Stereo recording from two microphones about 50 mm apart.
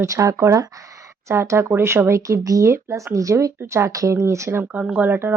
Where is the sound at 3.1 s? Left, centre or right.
Right.